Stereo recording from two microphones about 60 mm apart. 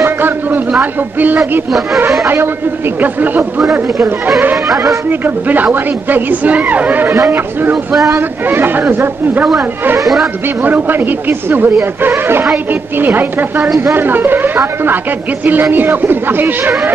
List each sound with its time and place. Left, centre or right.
0.0 s a sound: right
2.2 s speech: right
5.2 s speech: right
7.7 s speech: centre
8.5 s speech: right
10.6 s speech: right
13.0 s speech: right
15.7 s speech: right